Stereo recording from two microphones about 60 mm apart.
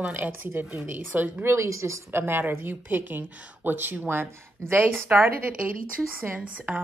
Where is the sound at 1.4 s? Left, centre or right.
Right.